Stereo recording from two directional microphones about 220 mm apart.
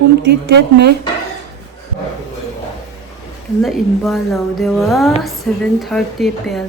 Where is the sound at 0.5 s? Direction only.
50° right (ahead or behind).